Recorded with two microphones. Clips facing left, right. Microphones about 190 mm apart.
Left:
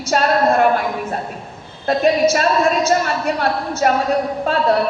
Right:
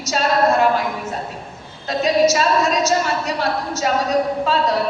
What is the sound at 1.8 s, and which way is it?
A woman's voice, 55° left (ahead or behind).